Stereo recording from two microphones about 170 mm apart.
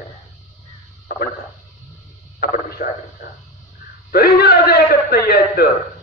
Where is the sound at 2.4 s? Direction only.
60° left (ahead or behind).